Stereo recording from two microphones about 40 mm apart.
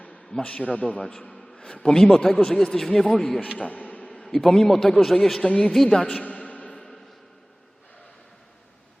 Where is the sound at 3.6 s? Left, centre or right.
Left.